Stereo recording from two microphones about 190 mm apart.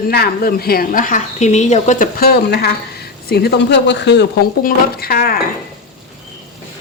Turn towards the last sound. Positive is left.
turn(degrees=50)  # may be behind; listen again after turning